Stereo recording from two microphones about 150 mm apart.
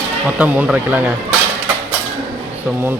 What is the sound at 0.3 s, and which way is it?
Speech, 10° right (ahead or behind).